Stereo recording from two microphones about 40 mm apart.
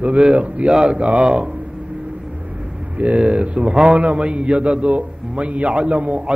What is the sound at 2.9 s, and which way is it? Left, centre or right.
A man's voice, right.